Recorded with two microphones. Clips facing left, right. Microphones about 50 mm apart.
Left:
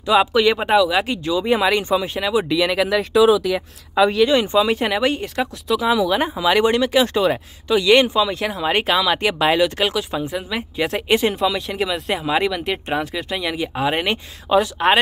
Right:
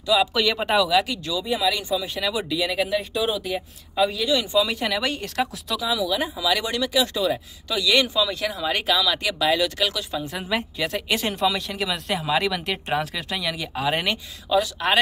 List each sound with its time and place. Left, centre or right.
0.0 s speech: left
1.4 s speech: left
2.1 s speech: left
2.5 s speech: left
4.3 s speech: left
5.2 s speech: centre
5.8 s speech: left
7.6 s speech: left
11.1 s speech: centre
12.6 s speech: centre
13.4 s speech: left